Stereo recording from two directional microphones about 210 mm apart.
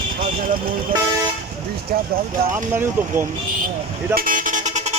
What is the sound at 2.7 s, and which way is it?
Speech, 10° right (ahead or behind).